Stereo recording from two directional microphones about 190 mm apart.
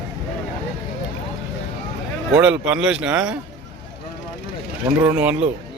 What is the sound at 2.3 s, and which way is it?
Speech, 5° right (ahead or behind).